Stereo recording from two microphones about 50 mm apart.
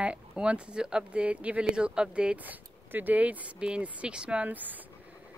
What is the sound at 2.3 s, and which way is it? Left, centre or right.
Speech, right.